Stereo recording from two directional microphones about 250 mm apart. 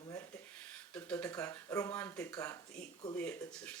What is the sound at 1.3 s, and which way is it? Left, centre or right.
Speech, centre.